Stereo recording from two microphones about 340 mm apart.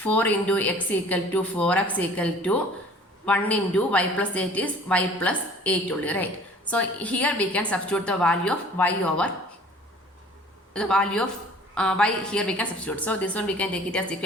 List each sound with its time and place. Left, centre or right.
0.0 s a woman's voice: centre
10.8 s a woman's voice: centre